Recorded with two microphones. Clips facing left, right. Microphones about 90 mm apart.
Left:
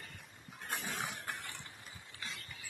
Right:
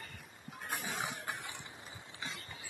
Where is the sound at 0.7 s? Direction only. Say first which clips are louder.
Right 1 dB; 5° right (ahead or behind).